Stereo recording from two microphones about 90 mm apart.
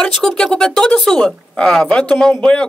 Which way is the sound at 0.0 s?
5° left (ahead or behind).